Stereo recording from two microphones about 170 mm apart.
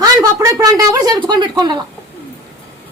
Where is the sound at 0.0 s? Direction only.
20° right (ahead or behind).